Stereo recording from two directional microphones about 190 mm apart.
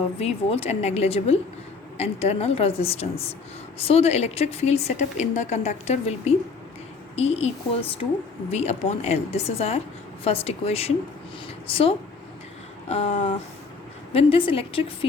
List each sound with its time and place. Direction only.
0.2 s a woman's voice: 30° left (ahead or behind)